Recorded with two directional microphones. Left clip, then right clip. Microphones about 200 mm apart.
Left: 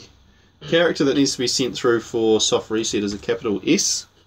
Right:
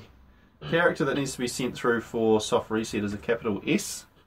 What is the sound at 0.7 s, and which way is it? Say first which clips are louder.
Speech: left 6 dB; 35° left (ahead or behind).